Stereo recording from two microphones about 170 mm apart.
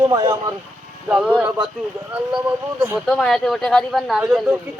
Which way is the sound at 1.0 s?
5° right (ahead or behind).